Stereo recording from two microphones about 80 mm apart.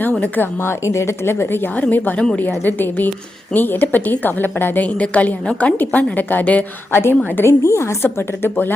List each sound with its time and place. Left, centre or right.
0.1 s a woman's voice: centre
0.6 s a woman's voice: left
7.6 s a woman's voice: left